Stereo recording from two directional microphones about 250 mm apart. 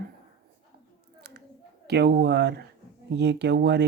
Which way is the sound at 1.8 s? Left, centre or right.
Right.